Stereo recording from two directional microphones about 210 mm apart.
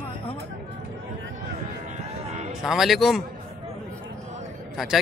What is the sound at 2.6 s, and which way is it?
Speech, centre (ahead or behind).